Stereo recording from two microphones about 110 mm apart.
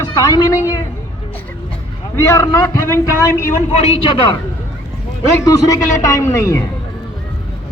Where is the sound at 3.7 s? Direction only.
65° left (ahead or behind).